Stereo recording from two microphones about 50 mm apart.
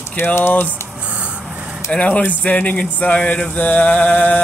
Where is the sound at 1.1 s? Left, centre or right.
Right.